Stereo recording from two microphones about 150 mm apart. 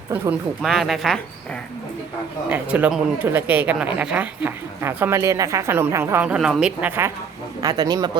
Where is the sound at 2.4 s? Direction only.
10° right (ahead or behind).